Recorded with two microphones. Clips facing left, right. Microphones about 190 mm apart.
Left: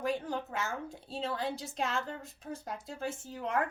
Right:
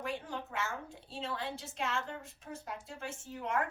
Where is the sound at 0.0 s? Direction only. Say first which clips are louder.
Left 6 dB; 40° left (ahead or behind).